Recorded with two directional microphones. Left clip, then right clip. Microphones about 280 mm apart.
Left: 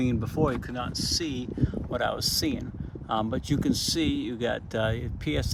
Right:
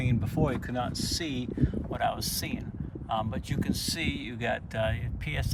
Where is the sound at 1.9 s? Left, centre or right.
Left.